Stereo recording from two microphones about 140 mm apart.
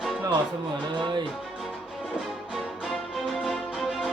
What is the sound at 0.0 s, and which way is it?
Music, 5° right (ahead or behind).